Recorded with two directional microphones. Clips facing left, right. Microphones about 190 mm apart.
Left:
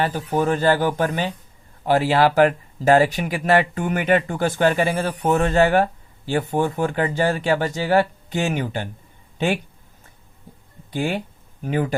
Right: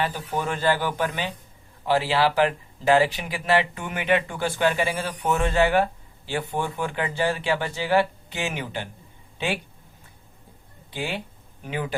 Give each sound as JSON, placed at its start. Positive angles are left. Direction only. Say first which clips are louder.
{"t": 0.0, "sound": "speech", "louder": "left 6 dB", "side_deg": 45}
{"t": 10.9, "sound": "speech", "louder": "left 7 dB", "side_deg": 45}